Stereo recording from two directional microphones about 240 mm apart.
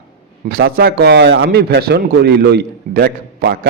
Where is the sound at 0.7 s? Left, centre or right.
Right.